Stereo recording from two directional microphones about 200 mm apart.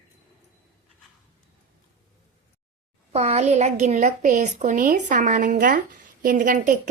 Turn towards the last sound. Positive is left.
turn(degrees=-40)  # may be behind; listen again after turning